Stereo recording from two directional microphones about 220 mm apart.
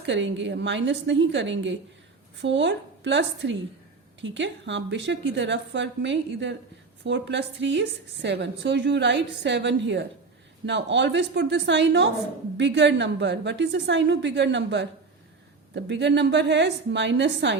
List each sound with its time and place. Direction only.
0.0 s a woman's voice: 55° right (ahead or behind)